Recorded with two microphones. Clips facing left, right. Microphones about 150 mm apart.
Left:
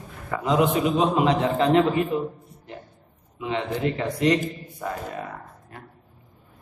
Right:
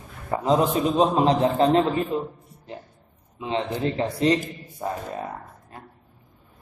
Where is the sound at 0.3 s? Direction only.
35° right (ahead or behind).